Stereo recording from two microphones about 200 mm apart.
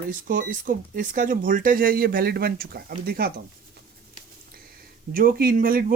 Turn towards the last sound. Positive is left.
turn(degrees=-45)  # may be behind; listen again after turning